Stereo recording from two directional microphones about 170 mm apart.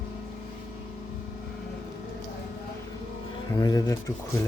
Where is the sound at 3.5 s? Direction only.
20° left (ahead or behind).